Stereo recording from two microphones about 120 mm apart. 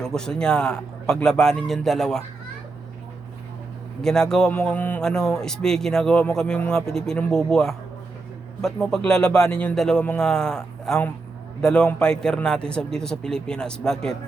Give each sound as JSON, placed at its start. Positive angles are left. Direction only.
{"t": 0.0, "sound": "a man's voice", "side_deg": 5}
{"t": 4.0, "sound": "a man's voice", "side_deg": 5}